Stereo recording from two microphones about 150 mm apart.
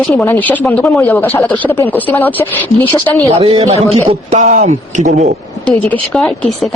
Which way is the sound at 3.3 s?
40° right (ahead or behind).